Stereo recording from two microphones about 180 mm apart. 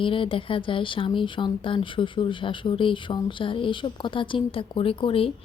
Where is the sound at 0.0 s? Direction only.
30° left (ahead or behind).